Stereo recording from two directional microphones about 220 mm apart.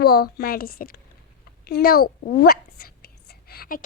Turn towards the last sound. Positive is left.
turn(degrees=40)  # may be behind; listen again after turning